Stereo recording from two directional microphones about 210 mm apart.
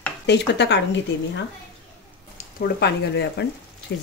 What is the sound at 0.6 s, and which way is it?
Speech, 55° left (ahead or behind).